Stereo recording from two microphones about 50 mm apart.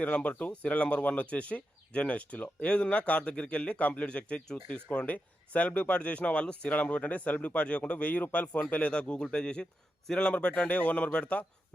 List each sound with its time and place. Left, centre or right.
0.0 s speech: left